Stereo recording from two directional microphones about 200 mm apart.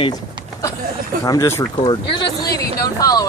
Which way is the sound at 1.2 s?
15° left (ahead or behind).